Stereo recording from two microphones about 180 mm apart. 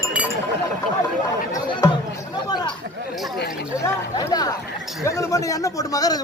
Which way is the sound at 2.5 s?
25° left (ahead or behind).